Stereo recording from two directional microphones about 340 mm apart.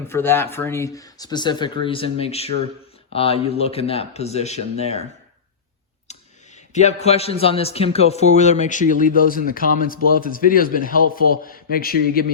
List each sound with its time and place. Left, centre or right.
0.1 s speech: centre
6.1 s a man's voice: centre